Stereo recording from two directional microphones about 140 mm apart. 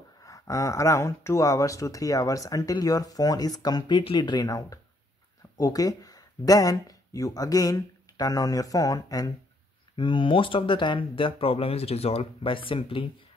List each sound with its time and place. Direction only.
0.2 s speech: 25° left (ahead or behind)
9.9 s speech: 35° left (ahead or behind)